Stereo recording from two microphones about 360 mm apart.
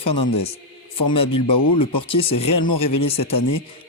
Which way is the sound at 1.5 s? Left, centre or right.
Left.